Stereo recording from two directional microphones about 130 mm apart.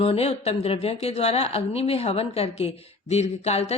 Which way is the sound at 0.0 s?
50° left (ahead or behind).